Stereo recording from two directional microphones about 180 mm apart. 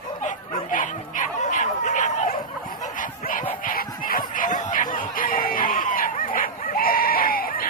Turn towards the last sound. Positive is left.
turn(degrees=55)  # may be behind; listen again after turning